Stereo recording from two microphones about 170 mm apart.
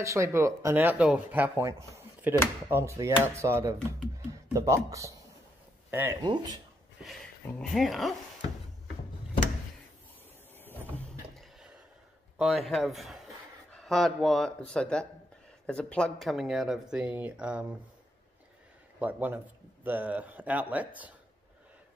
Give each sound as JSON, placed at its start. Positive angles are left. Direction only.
{"t": 0.0, "sound": "speech", "side_deg": -15}
{"t": 6.2, "sound": "speech", "side_deg": -25}
{"t": 7.0, "sound": "speech", "side_deg": 0}
{"t": 12.4, "sound": "speech", "side_deg": 0}
{"t": 18.9, "sound": "a man's voice", "side_deg": -10}